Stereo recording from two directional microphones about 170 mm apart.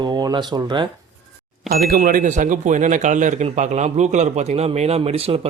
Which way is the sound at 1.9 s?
60° right (ahead or behind).